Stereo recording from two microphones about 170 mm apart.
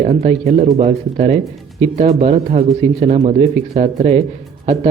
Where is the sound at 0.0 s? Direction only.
45° right (ahead or behind).